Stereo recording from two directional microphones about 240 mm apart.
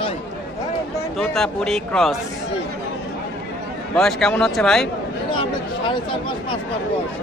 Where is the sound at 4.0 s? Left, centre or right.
Centre.